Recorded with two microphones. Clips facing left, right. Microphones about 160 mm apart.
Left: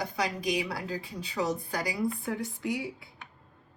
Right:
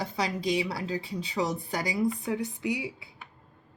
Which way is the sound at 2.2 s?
20° right (ahead or behind).